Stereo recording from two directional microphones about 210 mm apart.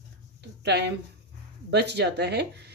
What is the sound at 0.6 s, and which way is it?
A woman's voice, 55° right (ahead or behind).